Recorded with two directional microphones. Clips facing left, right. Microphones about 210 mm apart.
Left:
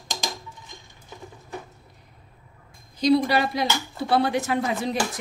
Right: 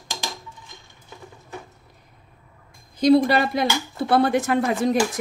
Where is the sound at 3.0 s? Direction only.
50° right (ahead or behind).